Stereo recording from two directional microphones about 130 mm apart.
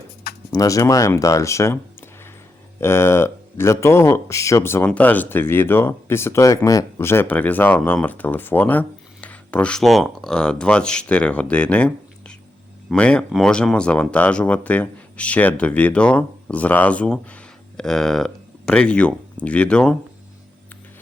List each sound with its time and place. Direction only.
0.5 s speech: 25° left (ahead or behind); by 20.0 s 5° left (ahead or behind)